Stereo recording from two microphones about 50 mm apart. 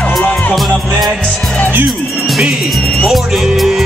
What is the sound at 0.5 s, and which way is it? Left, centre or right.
Music, centre.